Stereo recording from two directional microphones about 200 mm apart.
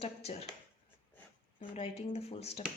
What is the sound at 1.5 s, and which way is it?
Speech, 30° left (ahead or behind).